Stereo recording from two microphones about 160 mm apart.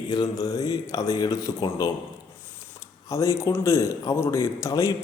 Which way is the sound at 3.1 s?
20° left (ahead or behind).